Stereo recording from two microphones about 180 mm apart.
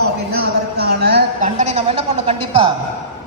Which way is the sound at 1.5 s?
35° right (ahead or behind).